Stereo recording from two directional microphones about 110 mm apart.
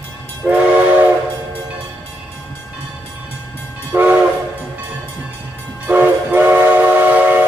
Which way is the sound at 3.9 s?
15° right (ahead or behind).